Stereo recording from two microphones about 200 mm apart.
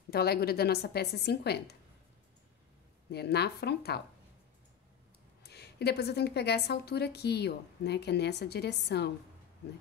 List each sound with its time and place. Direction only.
0.1 s a woman's voice: 50° left (ahead or behind)
3.1 s a woman's voice: 55° left (ahead or behind)
5.4 s a woman's voice: 55° left (ahead or behind)